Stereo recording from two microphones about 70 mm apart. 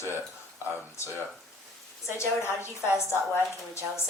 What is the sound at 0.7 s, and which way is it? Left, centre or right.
Speech, left.